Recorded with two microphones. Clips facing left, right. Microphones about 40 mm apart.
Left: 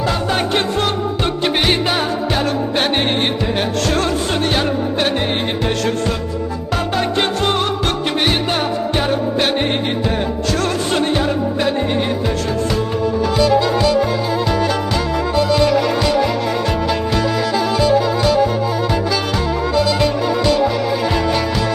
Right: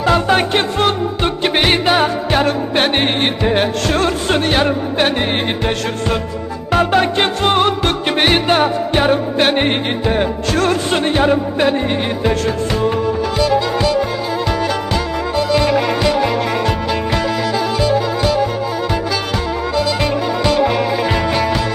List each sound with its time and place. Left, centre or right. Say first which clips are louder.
0.0 s music: right 5 dB; right
0.5 s music: right 2 dB; right
6.7 s music: right 7 dB; right
12.2 s music: right 3 dB; right
13.4 s music: left 1 dB; right
15.4 s music: even; right
17.7 s music: left 3 dB; right
19.7 s music: left 1 dB; right